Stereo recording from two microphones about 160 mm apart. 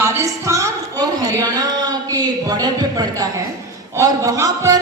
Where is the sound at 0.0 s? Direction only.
15° right (ahead or behind).